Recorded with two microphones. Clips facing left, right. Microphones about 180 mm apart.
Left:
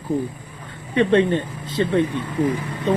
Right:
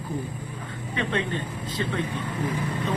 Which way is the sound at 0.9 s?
35° left (ahead or behind).